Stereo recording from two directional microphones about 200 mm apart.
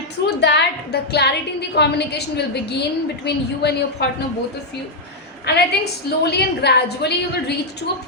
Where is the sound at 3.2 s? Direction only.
55° left (ahead or behind).